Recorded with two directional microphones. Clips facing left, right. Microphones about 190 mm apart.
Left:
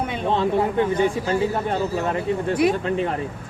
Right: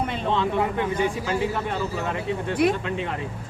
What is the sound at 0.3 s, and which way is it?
A man's voice, 40° left (ahead or behind).